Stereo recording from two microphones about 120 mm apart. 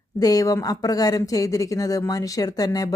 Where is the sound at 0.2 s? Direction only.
30° left (ahead or behind).